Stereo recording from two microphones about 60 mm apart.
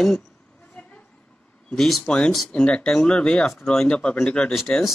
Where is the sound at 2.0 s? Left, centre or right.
Centre.